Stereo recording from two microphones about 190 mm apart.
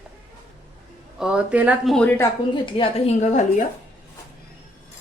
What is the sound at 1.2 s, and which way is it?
Speech, 5° right (ahead or behind).